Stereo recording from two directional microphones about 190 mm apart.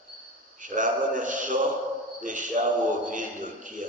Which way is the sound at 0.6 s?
45° right (ahead or behind).